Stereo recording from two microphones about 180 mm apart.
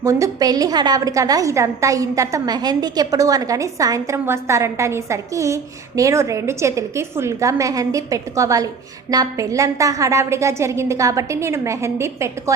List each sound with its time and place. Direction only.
0.0 s a woman's voice: 15° right (ahead or behind)